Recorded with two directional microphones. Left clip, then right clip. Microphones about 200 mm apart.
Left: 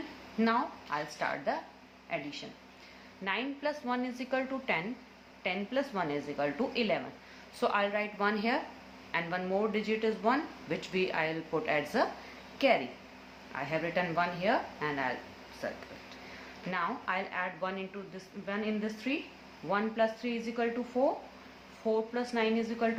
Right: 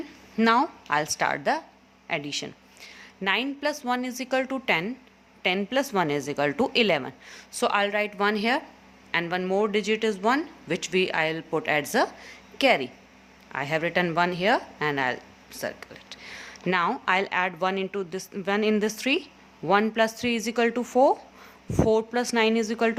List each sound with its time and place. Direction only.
0.3 s a woman's voice: 50° right (ahead or behind)